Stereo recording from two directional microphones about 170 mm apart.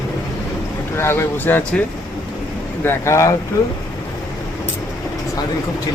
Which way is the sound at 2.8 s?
15° left (ahead or behind).